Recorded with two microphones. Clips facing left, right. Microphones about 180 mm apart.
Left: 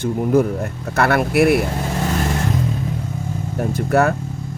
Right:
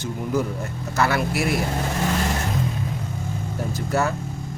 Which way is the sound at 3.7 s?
60° left (ahead or behind).